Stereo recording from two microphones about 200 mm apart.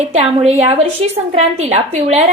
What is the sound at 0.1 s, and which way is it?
A woman's voice, 30° right (ahead or behind).